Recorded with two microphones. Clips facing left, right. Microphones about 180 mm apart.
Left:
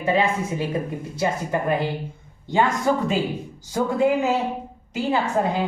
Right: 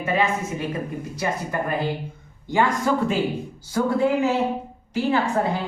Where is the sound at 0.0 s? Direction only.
30° left (ahead or behind).